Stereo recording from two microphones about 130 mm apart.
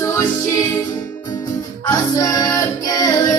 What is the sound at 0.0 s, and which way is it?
Music, 25° left (ahead or behind).